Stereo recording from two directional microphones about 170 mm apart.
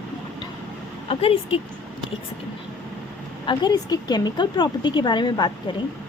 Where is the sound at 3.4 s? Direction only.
25° left (ahead or behind).